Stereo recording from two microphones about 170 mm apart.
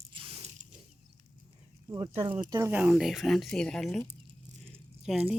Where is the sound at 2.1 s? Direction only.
35° right (ahead or behind).